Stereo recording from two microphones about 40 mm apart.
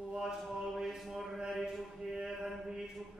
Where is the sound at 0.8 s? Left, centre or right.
Centre.